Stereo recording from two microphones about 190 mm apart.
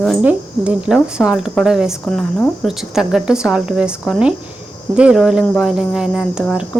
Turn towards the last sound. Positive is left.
turn(degrees=-5)  # may be behind; listen again after turning